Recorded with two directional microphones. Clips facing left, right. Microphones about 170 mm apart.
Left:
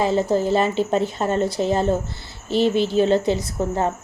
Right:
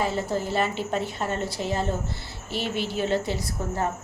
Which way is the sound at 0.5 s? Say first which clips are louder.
Left 7 dB; 25° left (ahead or behind).